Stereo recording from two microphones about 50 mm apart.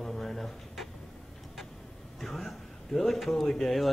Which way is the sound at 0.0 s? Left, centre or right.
Centre.